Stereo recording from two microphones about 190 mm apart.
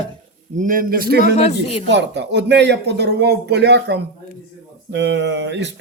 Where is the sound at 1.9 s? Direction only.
65° right (ahead or behind).